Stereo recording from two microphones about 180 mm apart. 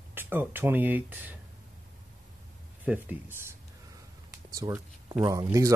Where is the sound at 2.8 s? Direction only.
10° right (ahead or behind).